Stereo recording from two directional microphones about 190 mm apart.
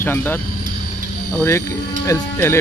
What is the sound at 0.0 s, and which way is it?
Speech, 10° left (ahead or behind).